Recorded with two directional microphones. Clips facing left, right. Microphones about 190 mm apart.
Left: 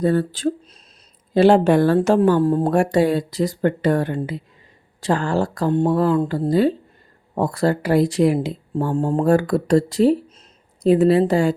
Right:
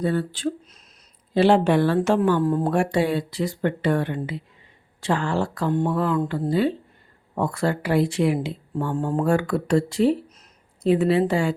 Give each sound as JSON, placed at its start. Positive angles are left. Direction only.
{"t": 0.0, "sound": "a woman's voice", "side_deg": 40}
{"t": 8.8, "sound": "speech", "side_deg": 30}